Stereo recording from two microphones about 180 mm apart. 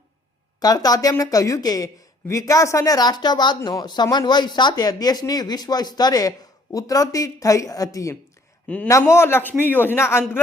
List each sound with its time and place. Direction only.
0.6 s a woman's voice: 20° left (ahead or behind)
8.6 s a man's voice: 5° left (ahead or behind)